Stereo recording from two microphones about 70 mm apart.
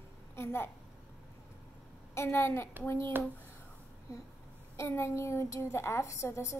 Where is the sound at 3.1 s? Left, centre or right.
Right.